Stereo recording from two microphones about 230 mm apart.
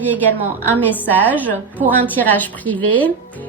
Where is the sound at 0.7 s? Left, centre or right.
Centre.